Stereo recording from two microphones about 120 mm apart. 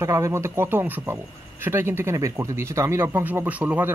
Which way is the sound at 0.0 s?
25° right (ahead or behind).